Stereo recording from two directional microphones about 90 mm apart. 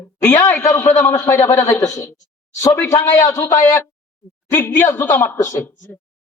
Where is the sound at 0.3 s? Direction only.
30° left (ahead or behind).